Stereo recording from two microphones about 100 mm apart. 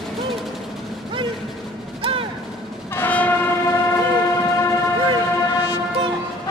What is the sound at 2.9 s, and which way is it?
Train, 15° left (ahead or behind).